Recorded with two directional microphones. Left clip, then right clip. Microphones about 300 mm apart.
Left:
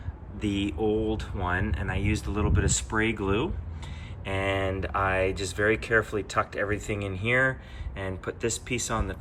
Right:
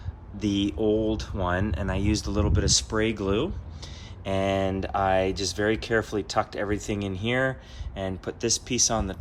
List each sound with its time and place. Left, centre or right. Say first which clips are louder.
0.3 s speech: right 3 dB; centre